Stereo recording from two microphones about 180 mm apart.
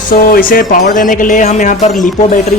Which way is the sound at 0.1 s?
50° left (ahead or behind).